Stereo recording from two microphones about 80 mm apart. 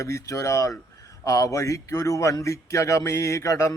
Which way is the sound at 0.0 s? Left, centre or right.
Left.